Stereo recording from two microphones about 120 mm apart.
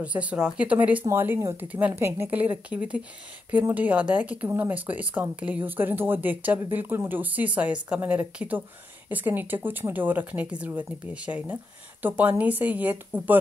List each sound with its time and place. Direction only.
0.0 s speech: 10° right (ahead or behind)